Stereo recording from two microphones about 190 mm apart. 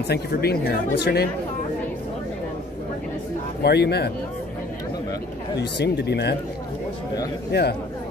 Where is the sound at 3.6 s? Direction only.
60° left (ahead or behind).